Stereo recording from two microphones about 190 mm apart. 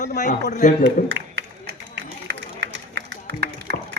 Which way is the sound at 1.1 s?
65° right (ahead or behind).